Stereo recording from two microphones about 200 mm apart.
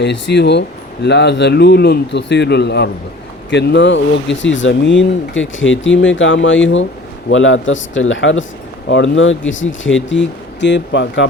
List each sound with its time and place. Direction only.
0.0 s a man's voice: 60° left (ahead or behind)